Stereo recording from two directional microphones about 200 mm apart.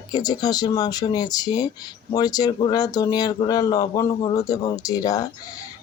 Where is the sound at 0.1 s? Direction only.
20° left (ahead or behind).